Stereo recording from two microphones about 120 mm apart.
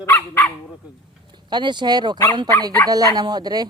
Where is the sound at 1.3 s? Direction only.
40° right (ahead or behind).